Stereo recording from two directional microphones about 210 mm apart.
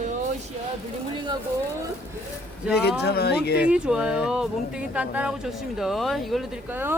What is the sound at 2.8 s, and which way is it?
Speech, 50° left (ahead or behind).